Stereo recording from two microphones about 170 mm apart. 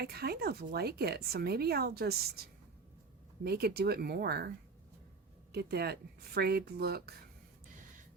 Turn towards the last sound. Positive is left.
turn(degrees=-70)  # may be behind; listen again after turning